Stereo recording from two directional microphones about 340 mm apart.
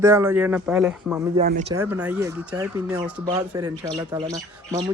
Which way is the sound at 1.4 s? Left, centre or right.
Right.